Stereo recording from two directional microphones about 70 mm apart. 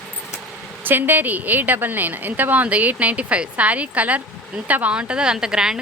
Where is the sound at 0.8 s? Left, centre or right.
Right.